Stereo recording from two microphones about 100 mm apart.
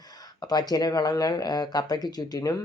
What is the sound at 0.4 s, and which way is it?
Speech, 40° left (ahead or behind).